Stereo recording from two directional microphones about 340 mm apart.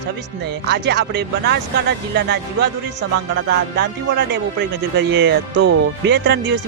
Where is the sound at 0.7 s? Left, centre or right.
Right.